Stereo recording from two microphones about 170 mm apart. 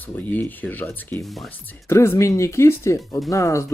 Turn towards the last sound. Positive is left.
turn(degrees=20)  # may be behind; listen again after turning